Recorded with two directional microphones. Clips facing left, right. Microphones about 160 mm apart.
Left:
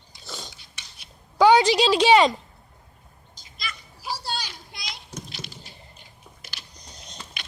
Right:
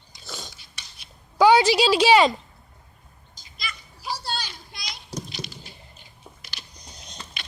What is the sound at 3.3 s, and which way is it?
Children playing, centre (ahead or behind).